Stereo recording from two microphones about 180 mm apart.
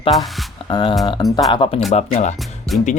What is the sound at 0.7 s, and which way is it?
Speech, 25° left (ahead or behind).